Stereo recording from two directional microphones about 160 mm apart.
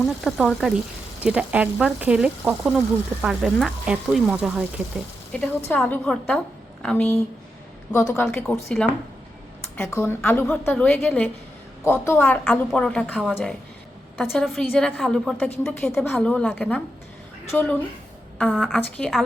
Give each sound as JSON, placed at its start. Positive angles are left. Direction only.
{"t": 0.3, "sound": "speech", "side_deg": 0}
{"t": 7.9, "sound": "speech", "side_deg": 15}
{"t": 16.0, "sound": "speech", "side_deg": 15}
{"t": 18.3, "sound": "speech", "side_deg": 0}